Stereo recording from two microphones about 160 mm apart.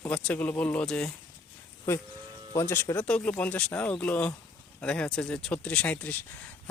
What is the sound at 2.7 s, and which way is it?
Speech, 10° left (ahead or behind).